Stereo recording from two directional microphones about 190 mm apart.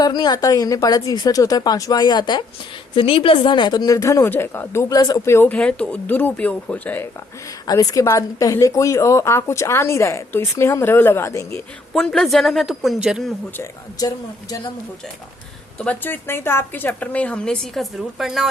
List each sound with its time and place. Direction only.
0.0 s a woman's voice: 20° left (ahead or behind)
11.9 s a woman's voice: 5° left (ahead or behind)
14.0 s a woman's voice: 20° left (ahead or behind)
15.8 s a woman's voice: 10° left (ahead or behind)